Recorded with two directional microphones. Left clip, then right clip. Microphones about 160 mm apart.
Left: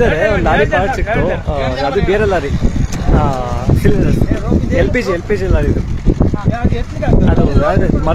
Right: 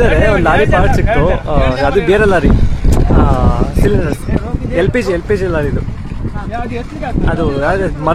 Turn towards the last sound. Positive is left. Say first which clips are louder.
# even
turn(degrees=-20)  # may be behind; listen again after turning